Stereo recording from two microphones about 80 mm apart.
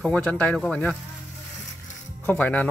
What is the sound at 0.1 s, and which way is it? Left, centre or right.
Speech, centre.